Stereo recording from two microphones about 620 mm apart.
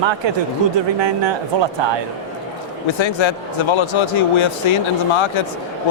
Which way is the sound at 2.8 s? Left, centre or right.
Left.